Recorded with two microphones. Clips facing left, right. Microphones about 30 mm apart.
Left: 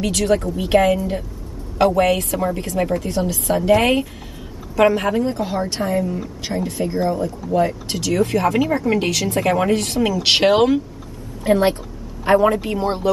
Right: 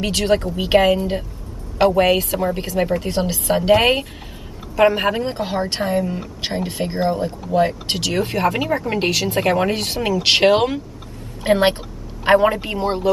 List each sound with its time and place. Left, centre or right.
0.0 s a woman's voice: right
2.9 s speech: right
8.3 s a woman's voice: right
8.6 s speech: centre
9.0 s a woman's voice: right
9.8 s a woman's voice: right
11.4 s speech: right
12.4 s speech: right